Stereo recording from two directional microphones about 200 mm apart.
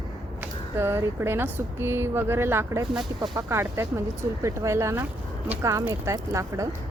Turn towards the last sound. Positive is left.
turn(degrees=-15)  # may be behind; listen again after turning